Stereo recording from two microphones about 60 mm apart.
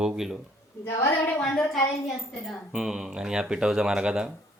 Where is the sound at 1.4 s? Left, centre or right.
Centre.